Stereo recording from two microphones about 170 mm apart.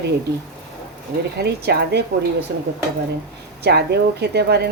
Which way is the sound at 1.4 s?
75° right (ahead or behind).